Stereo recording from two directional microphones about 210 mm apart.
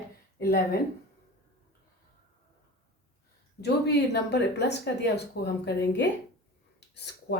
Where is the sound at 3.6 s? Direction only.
55° left (ahead or behind).